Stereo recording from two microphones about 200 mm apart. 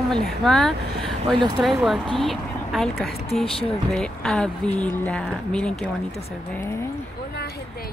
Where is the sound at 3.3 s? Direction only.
Centre (ahead or behind).